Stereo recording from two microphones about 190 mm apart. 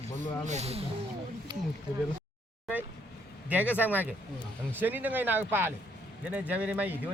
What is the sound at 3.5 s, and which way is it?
Speech, 10° right (ahead or behind).